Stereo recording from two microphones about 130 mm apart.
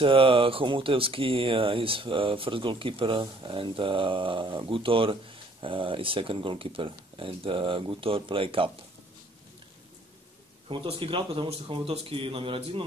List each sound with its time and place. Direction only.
0.0 s speech: 45° right (ahead or behind)
10.7 s speech: 45° right (ahead or behind)